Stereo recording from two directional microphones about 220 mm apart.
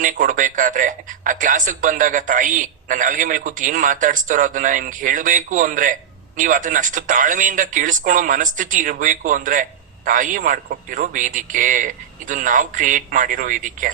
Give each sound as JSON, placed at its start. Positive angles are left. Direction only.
{"t": 0.0, "sound": "speech", "side_deg": -35}